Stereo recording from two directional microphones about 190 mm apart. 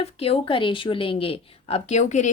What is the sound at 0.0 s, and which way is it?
A woman's voice, 30° left (ahead or behind).